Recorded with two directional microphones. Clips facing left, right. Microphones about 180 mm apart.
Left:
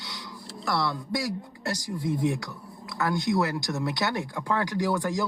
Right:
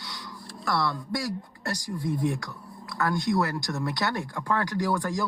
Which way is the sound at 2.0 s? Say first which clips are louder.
Left 1 dB; 20° left (ahead or behind).